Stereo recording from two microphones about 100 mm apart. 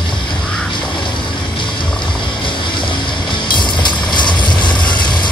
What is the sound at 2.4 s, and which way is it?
Vehicle, 55° left (ahead or behind).